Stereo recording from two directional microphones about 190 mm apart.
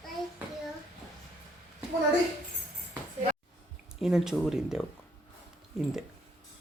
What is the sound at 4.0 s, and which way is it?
Speech, 5° right (ahead or behind).